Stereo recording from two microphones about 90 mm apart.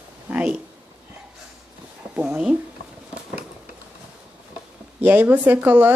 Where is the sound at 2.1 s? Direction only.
15° right (ahead or behind).